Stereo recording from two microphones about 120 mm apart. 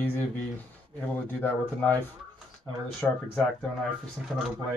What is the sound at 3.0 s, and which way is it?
Speech, 15° left (ahead or behind).